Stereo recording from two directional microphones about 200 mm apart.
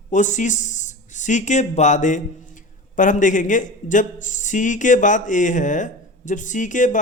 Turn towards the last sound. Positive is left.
turn(degrees=40)  # may be behind; listen again after turning